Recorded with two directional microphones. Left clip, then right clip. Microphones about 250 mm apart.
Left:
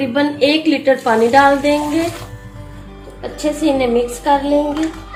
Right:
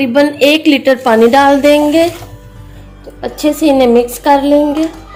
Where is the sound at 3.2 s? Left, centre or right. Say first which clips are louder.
Right 6 dB; right.